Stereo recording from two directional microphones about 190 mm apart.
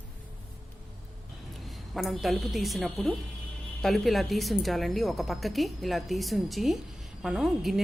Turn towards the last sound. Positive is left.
turn(degrees=0)  # may be behind; listen again after turning